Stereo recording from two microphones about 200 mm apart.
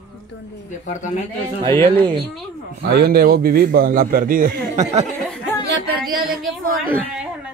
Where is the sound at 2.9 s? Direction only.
50° right (ahead or behind); by 5.0 s 35° right (ahead or behind).